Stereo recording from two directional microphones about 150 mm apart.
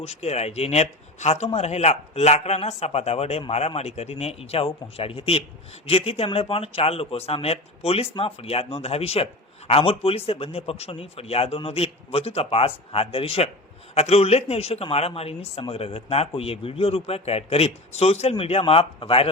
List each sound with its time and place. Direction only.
0.0 s speech: 45° left (ahead or behind)